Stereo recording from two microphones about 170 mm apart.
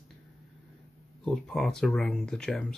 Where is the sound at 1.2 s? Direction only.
5° left (ahead or behind).